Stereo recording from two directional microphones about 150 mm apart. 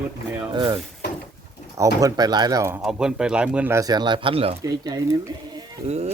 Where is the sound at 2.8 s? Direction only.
5° right (ahead or behind).